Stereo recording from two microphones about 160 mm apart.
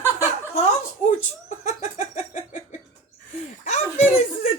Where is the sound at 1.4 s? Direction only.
45° left (ahead or behind).